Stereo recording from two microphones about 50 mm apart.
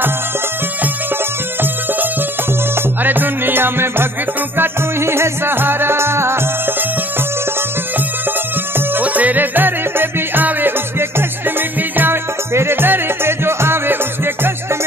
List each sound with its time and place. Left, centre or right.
3.0 s music: right
9.0 s music: right